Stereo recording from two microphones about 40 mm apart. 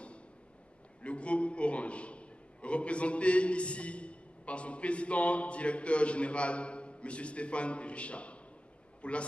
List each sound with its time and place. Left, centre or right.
1.0 s a man's voice: left